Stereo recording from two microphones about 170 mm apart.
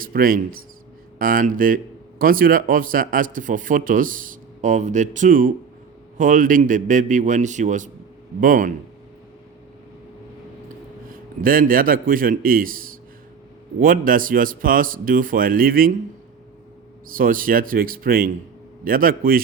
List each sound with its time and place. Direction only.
0.0 s a man's voice: 55° right (ahead or behind)
11.1 s a man's voice: 55° right (ahead or behind)
17.1 s a man's voice: 55° right (ahead or behind)